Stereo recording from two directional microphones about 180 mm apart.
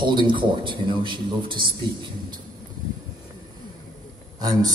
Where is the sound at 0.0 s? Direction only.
25° right (ahead or behind).